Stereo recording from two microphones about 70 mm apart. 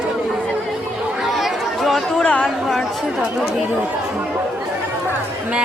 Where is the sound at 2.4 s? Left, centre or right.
Centre.